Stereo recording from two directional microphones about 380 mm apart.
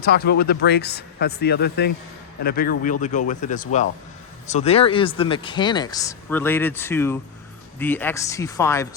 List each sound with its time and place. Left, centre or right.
0.0 s speech: left; by 8.9 s centre